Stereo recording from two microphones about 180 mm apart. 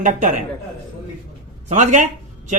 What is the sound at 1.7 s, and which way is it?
Speech, 45° right (ahead or behind).